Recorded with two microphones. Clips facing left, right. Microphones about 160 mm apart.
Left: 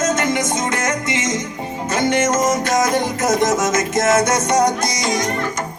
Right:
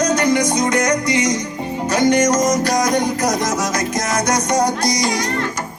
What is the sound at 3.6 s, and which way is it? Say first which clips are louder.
Music: left 4 dB; 25° left (ahead or behind).